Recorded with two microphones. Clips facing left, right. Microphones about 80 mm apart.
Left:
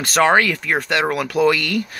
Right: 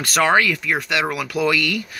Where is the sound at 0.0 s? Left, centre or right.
Left.